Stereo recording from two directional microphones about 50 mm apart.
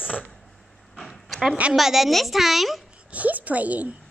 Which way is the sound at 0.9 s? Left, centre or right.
Centre.